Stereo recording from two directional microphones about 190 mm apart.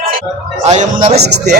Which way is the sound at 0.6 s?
40° right (ahead or behind).